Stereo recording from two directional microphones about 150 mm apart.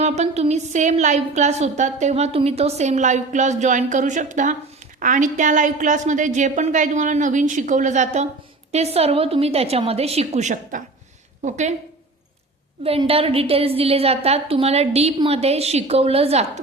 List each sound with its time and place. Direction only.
0.0 s a woman's voice: 45° right (ahead or behind)
12.8 s a woman's voice: 40° right (ahead or behind)